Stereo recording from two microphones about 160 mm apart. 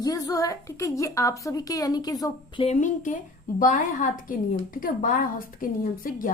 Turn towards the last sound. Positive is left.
turn(degrees=60)  # may be behind; listen again after turning